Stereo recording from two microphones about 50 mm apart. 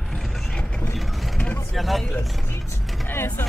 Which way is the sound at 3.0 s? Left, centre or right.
Left.